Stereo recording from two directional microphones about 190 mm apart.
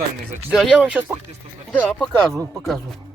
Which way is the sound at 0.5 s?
Centre (ahead or behind).